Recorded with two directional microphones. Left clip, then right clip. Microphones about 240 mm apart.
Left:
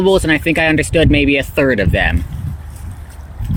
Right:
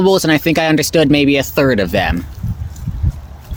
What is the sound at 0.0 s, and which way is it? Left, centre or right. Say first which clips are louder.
Speech: even; centre.